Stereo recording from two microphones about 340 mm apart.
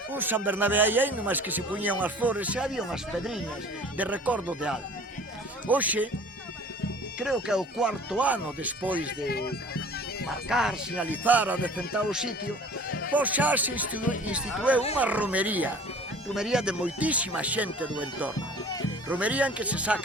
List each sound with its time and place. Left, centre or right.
0.1 s speech: centre
7.2 s speech: centre
9.2 s speech: left
10.2 s speech: centre
18.3 s bagpipes: centre
19.0 s speech: centre